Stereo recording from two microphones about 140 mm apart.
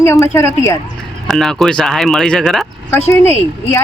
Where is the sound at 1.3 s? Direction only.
5° left (ahead or behind).